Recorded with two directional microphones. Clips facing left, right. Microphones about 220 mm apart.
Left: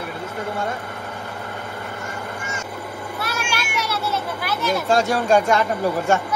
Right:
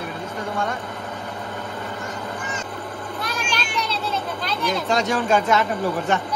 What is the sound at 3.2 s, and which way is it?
Children playing, 10° left (ahead or behind).